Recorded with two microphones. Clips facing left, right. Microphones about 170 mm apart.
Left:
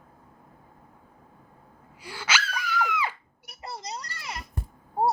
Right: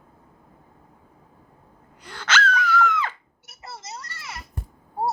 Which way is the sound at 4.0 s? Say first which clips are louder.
Even; 25° right (ahead or behind).